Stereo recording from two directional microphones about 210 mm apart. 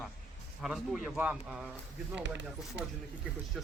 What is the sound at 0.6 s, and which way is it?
Speech, centre (ahead or behind).